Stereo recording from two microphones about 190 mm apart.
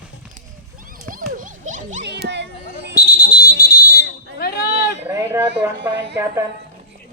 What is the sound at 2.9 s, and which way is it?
Fire alarm, 50° left (ahead or behind).